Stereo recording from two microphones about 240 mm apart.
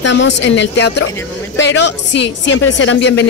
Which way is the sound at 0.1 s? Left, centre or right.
Left.